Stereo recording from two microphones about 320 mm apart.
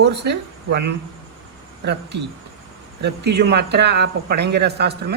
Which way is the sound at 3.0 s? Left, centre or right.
Right.